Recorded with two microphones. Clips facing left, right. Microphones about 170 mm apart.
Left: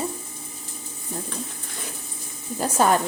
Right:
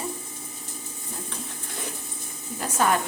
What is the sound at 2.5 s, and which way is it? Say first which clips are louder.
Speech: left 4 dB; 35° left (ahead or behind).